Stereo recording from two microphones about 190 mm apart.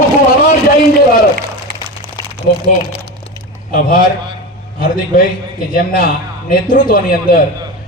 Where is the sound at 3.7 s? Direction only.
50° left (ahead or behind).